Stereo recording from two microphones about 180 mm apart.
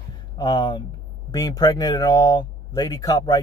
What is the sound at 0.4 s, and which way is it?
A man's voice, 25° left (ahead or behind).